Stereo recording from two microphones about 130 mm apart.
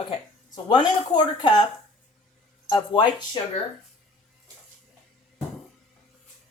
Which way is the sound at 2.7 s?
35° left (ahead or behind).